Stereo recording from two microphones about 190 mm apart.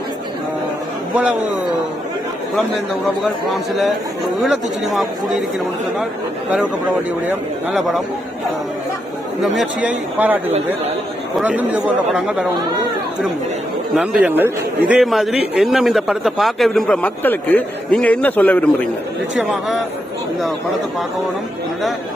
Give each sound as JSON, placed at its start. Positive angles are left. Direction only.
{"t": 1.1, "sound": "speech", "side_deg": -5}
{"t": 3.5, "sound": "speech", "side_deg": 0}
{"t": 7.3, "sound": "speech", "side_deg": 0}
{"t": 9.4, "sound": "speech", "side_deg": -5}
{"t": 13.9, "sound": "speech", "side_deg": 0}